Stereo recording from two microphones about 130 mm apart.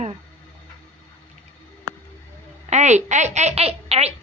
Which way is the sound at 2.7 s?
60° right (ahead or behind).